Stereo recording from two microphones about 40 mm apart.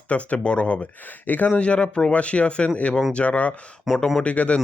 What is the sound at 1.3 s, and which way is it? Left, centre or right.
Speech, left.